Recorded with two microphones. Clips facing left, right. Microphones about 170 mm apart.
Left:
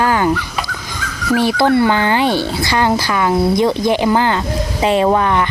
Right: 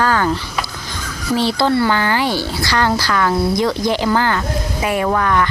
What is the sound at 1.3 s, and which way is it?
Speech, 15° left (ahead or behind).